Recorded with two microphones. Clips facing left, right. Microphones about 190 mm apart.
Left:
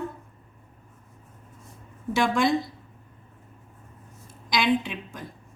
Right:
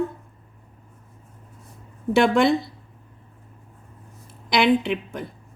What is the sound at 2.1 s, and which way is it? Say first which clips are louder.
Speech: right 6 dB; 60° right (ahead or behind).